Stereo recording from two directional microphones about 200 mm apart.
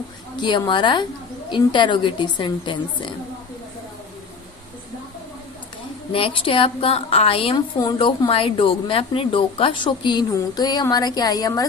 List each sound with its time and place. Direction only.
0.4 s a woman's voice: 20° left (ahead or behind)
6.1 s a woman's voice: 25° left (ahead or behind)